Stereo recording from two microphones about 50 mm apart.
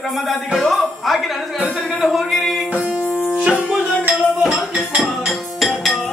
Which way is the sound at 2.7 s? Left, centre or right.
Right.